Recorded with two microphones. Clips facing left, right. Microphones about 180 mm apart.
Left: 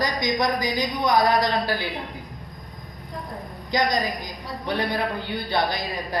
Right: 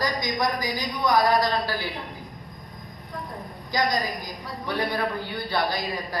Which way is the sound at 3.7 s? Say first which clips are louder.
Left 2 dB; 20° left (ahead or behind).